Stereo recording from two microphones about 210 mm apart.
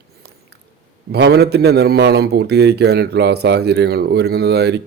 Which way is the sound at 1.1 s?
50° right (ahead or behind).